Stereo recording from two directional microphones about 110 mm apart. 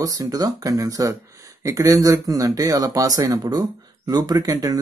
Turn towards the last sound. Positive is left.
turn(degrees=-35)  # may be behind; listen again after turning